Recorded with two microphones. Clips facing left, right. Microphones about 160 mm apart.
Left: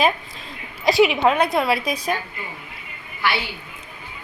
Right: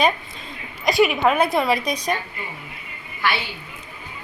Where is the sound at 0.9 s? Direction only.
25° left (ahead or behind).